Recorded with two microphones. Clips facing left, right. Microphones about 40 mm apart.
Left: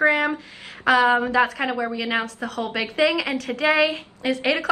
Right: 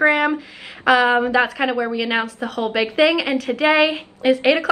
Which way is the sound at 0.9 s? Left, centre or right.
Right.